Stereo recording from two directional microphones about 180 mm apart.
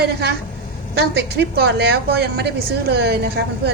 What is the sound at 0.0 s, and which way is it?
A woman's voice, 65° right (ahead or behind).